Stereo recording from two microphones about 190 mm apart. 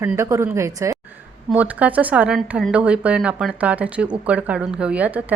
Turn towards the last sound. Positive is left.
turn(degrees=-5)  # may be behind; listen again after turning